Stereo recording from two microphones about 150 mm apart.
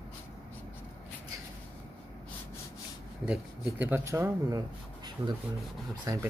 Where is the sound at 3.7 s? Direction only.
10° right (ahead or behind).